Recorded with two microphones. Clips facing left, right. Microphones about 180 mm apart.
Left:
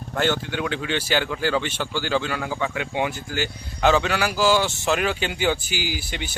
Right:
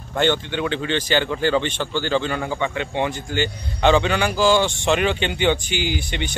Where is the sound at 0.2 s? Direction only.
5° left (ahead or behind).